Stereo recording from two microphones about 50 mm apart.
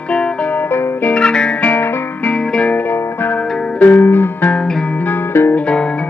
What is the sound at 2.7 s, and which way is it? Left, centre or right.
Music, left.